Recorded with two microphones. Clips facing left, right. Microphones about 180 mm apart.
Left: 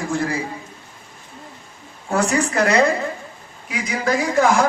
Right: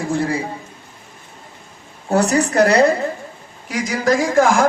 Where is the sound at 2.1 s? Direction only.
35° right (ahead or behind).